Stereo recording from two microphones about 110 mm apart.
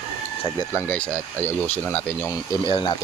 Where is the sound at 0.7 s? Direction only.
15° left (ahead or behind).